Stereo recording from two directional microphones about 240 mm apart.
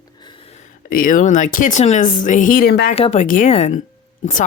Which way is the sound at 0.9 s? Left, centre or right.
Left.